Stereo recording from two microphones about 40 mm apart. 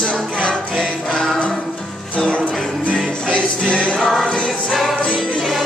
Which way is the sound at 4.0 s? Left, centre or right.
Centre.